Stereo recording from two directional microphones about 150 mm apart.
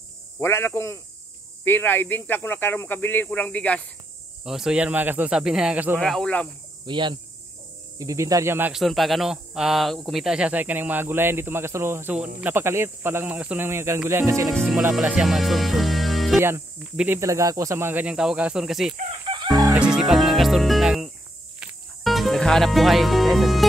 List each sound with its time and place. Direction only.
0.4 s speech: 15° left (ahead or behind)
4.5 s speech: 5° right (ahead or behind)
5.9 s speech: 5° left (ahead or behind)
6.9 s speech: 30° right (ahead or behind); by 8.7 s 15° right (ahead or behind)
8.7 s speech: centre (ahead or behind); by 14.5 s 20° right (ahead or behind)
14.5 s speech: 5° left (ahead or behind)
14.8 s speech: 10° right (ahead or behind)
16.3 s speech: 15° right (ahead or behind)
17.2 s speech: 20° right (ahead or behind); by 18.9 s 5° right (ahead or behind)
19.2 s chicken: 30° right (ahead or behind)
19.5 s music: 5° right (ahead or behind)